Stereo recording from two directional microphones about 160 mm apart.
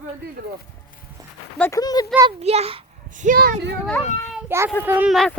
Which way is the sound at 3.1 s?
55° right (ahead or behind).